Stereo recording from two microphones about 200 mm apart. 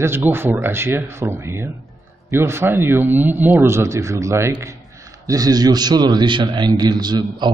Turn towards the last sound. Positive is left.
turn(degrees=-20)  # may be behind; listen again after turning